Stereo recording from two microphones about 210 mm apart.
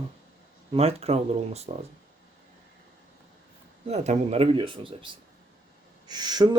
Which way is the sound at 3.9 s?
30° right (ahead or behind).